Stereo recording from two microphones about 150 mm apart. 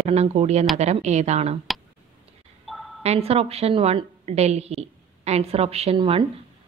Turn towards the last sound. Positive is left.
turn(degrees=-40)  # may be behind; listen again after turning